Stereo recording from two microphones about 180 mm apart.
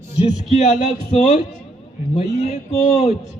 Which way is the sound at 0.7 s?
40° left (ahead or behind).